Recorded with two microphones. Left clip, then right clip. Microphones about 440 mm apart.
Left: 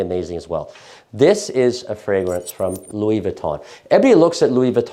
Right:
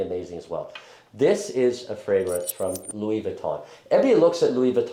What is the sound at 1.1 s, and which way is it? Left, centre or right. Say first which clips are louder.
Speech: left 7 dB; left.